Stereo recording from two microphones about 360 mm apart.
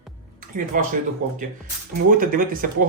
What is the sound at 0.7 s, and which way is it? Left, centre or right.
Speech, right.